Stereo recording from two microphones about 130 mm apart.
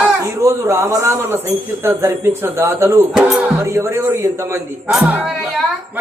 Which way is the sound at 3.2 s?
5° right (ahead or behind).